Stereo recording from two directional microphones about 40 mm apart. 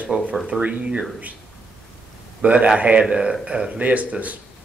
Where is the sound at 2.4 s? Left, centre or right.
Right.